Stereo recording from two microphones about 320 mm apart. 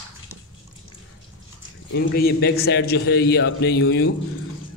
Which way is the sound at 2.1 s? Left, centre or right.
Left.